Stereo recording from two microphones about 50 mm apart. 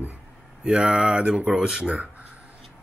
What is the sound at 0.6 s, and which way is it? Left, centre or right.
Speech, centre.